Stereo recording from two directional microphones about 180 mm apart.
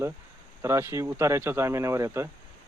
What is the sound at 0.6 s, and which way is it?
Speech, 15° right (ahead or behind).